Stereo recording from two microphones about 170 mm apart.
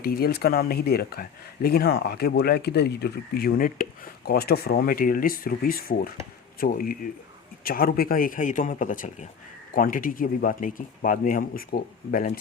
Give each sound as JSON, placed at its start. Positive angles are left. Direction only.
{"t": 0.0, "sound": "speech", "side_deg": 65}